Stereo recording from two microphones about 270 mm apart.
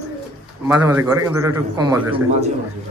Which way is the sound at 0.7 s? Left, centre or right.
Centre.